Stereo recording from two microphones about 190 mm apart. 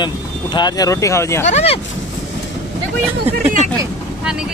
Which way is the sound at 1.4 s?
35° left (ahead or behind).